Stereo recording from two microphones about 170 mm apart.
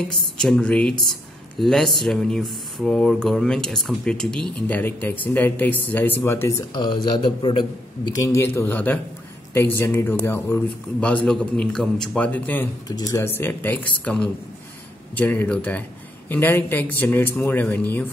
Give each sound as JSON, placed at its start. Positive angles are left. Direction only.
{"t": 0.4, "sound": "speech", "side_deg": 5}
{"t": 6.7, "sound": "a man's voice", "side_deg": 25}
{"t": 8.1, "sound": "speech", "side_deg": 15}
{"t": 12.8, "sound": "speech", "side_deg": 20}